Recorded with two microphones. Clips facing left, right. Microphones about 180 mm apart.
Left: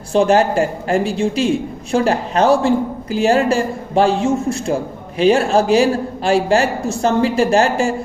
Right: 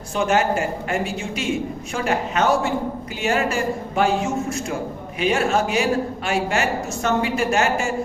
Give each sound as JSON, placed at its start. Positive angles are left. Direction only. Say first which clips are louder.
{"t": 0.1, "sound": "speech", "louder": "left 6 dB", "side_deg": 30}